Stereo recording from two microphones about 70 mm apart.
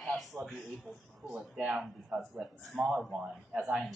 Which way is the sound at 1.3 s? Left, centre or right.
Centre.